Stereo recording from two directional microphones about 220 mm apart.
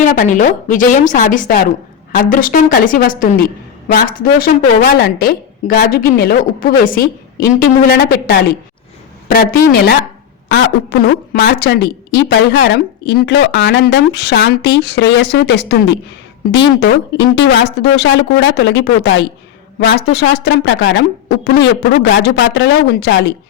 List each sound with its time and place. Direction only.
0.0 s a woman's voice: 35° left (ahead or behind)